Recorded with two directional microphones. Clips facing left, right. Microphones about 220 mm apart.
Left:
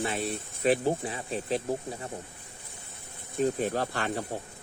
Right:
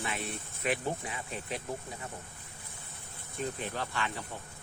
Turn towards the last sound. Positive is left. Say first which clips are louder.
# left 6 dB
turn(degrees=45)  # may be behind; listen again after turning